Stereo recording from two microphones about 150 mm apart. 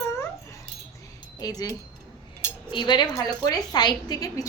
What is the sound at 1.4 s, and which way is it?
A woman's voice, 25° left (ahead or behind).